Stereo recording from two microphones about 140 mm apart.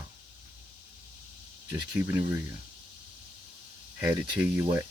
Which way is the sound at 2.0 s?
15° right (ahead or behind).